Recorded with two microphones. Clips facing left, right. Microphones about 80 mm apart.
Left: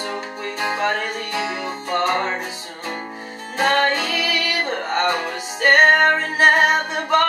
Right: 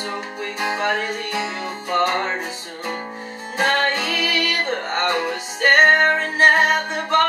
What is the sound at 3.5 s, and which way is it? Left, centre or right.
Music, centre.